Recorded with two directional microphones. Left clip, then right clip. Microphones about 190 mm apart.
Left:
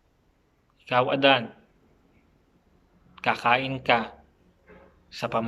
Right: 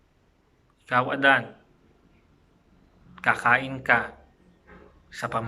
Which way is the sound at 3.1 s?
15° left (ahead or behind).